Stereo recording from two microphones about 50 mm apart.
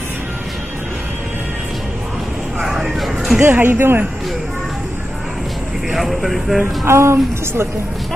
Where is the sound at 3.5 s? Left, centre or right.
Right.